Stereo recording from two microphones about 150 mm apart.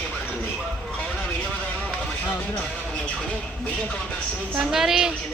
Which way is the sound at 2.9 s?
5° left (ahead or behind).